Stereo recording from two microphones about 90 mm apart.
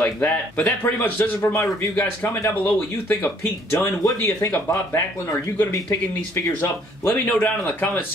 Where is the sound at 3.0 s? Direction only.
25° left (ahead or behind).